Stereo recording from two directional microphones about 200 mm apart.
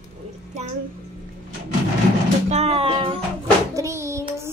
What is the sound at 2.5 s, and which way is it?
Speech, 30° right (ahead or behind).